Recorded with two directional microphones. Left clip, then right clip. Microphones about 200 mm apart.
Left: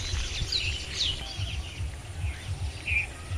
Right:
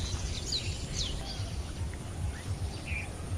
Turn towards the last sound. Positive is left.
turn(degrees=20)  # may be behind; listen again after turning